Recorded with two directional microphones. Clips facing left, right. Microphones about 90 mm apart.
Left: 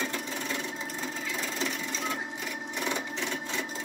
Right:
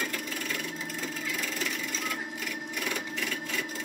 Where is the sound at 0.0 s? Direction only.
25° left (ahead or behind).